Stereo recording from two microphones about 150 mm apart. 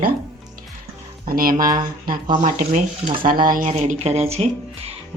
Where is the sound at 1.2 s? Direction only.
70° right (ahead or behind).